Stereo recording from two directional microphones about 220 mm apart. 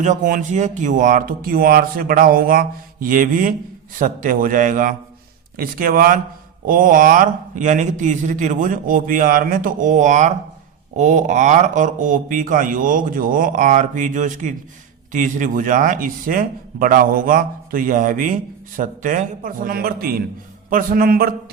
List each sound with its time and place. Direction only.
0.0 s speech: 35° right (ahead or behind)